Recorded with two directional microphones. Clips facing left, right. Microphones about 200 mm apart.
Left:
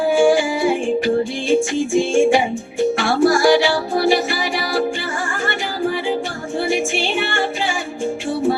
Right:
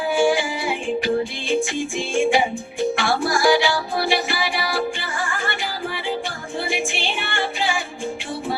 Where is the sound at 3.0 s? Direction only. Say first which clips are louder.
Left 7 dB; 45° left (ahead or behind).